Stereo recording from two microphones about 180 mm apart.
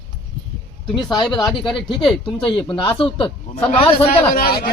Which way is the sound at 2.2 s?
25° left (ahead or behind).